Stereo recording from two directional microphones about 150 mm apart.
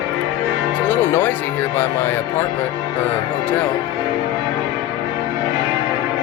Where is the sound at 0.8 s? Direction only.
10° left (ahead or behind).